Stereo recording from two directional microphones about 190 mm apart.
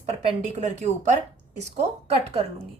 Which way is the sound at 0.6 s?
40° right (ahead or behind).